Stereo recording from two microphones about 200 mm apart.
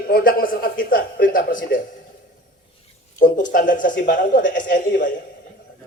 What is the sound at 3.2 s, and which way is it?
A man's voice, 40° left (ahead or behind).